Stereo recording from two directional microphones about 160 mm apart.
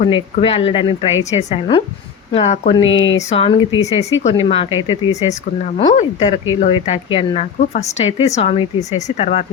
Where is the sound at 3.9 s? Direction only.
45° left (ahead or behind).